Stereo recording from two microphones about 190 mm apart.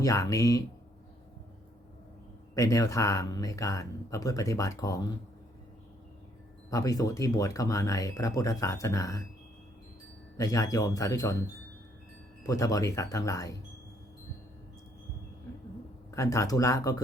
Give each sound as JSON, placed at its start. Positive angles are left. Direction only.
{"t": 0.0, "sound": "speech", "side_deg": 15}
{"t": 2.6, "sound": "speech", "side_deg": 15}
{"t": 6.7, "sound": "speech", "side_deg": 20}
{"t": 10.3, "sound": "speech", "side_deg": 15}
{"t": 12.5, "sound": "speech", "side_deg": 20}
{"t": 16.1, "sound": "speech", "side_deg": 15}